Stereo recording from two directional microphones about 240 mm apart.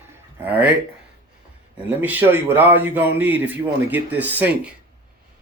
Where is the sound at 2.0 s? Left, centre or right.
Centre.